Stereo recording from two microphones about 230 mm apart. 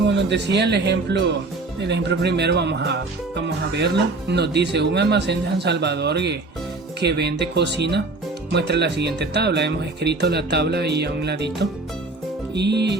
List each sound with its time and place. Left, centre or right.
0.1 s speech: right